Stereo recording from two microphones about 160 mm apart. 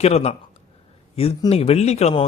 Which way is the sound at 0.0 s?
40° left (ahead or behind).